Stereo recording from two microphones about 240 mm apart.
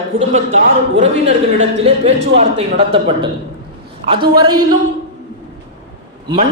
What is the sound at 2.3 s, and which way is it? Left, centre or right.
Speech, right.